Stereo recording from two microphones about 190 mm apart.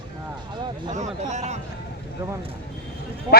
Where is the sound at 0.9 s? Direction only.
40° right (ahead or behind).